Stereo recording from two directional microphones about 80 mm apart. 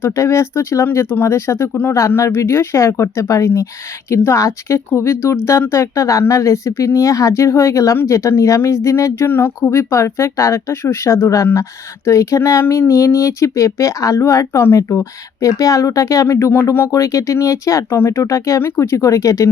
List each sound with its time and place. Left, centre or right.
0.0 s speech: left
16.9 s speech: left
17.8 s speech: left